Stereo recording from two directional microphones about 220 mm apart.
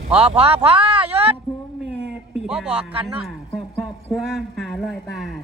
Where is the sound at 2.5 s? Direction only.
Centre (ahead or behind).